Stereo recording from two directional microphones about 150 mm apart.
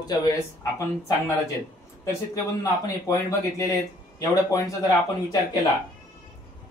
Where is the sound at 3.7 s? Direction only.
20° left (ahead or behind).